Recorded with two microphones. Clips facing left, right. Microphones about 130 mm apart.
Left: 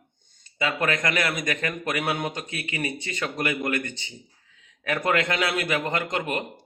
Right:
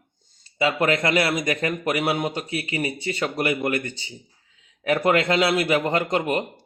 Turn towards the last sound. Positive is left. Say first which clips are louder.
# right 5 dB
turn(degrees=-30)  # may be behind; listen again after turning